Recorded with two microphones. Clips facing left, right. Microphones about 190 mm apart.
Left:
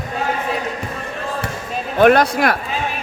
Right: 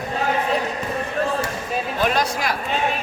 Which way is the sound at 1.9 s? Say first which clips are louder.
Left 11 dB; 60° left (ahead or behind).